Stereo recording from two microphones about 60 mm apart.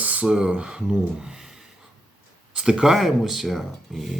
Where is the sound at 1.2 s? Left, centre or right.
Centre.